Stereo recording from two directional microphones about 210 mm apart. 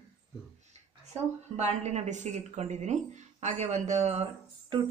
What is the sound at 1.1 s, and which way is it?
A woman's voice, 30° right (ahead or behind).